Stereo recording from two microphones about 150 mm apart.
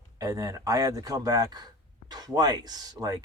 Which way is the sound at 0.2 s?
20° right (ahead or behind).